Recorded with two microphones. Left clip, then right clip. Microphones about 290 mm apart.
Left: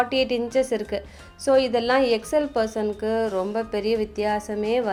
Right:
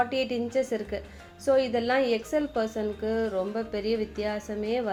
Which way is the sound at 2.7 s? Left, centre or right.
Centre.